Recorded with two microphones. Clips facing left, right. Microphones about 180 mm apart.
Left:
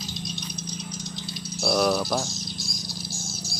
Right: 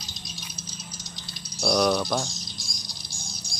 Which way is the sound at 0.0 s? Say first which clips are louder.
Left 9 dB; centre (ahead or behind).